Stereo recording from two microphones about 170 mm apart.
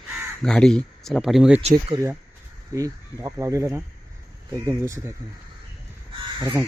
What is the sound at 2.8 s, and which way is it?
Speech, 20° right (ahead or behind).